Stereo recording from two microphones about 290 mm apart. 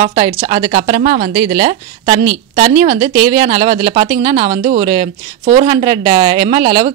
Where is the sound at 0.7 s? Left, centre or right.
Right.